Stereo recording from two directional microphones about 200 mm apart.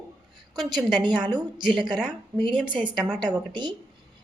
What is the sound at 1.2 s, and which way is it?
Speech, 20° right (ahead or behind).